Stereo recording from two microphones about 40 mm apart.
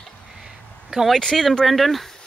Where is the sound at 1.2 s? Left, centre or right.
Centre.